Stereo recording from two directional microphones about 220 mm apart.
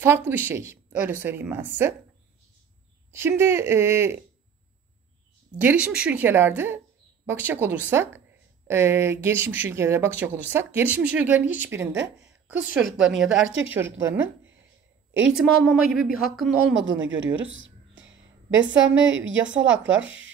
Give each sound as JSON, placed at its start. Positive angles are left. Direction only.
{"t": 0.0, "sound": "speech", "side_deg": -10}
{"t": 3.1, "sound": "speech", "side_deg": -10}
{"t": 5.6, "sound": "a woman's voice", "side_deg": -5}
{"t": 13.4, "sound": "speech", "side_deg": -60}
{"t": 13.7, "sound": "a woman's voice", "side_deg": -10}
{"t": 16.8, "sound": "a sound", "side_deg": -60}
{"t": 18.8, "sound": "speech", "side_deg": -60}